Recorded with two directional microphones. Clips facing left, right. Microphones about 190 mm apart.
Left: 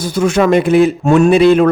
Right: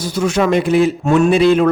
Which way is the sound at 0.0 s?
55° left (ahead or behind).